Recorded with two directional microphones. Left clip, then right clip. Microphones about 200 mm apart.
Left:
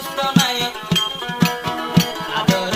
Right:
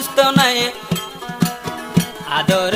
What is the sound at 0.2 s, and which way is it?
Music, 50° right (ahead or behind).